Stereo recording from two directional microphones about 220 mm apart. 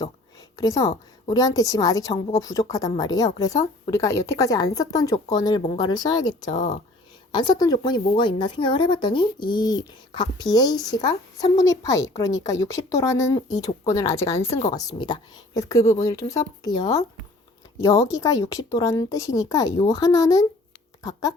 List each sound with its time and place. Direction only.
0.5 s a woman's voice: 15° left (ahead or behind)